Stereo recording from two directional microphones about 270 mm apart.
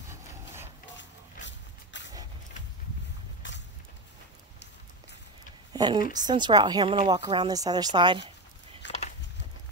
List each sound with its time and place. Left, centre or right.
0.9 s dog: left
5.7 s a woman's voice: centre
8.8 s a sound: left